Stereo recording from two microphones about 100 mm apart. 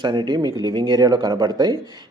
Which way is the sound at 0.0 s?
50° right (ahead or behind).